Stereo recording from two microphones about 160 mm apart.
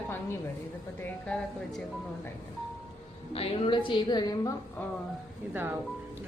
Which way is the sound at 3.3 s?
35° left (ahead or behind).